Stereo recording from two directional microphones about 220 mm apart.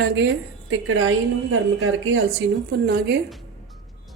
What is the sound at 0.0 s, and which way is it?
A woman's voice, 55° right (ahead or behind).